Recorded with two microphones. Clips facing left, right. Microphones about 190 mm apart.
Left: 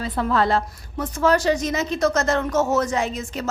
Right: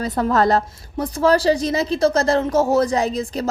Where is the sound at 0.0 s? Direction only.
40° right (ahead or behind).